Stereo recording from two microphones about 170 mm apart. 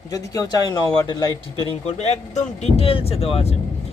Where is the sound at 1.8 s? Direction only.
40° left (ahead or behind).